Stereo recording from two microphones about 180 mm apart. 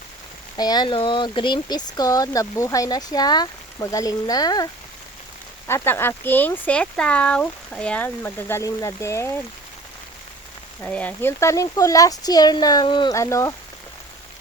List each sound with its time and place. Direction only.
0.5 s speech: 20° left (ahead or behind)
10.8 s speech: 10° left (ahead or behind)